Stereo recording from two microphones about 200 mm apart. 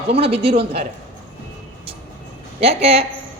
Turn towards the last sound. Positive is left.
turn(degrees=-30)  # may be behind; listen again after turning